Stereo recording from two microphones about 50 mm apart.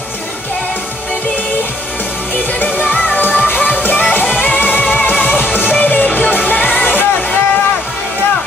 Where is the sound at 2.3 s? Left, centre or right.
Left.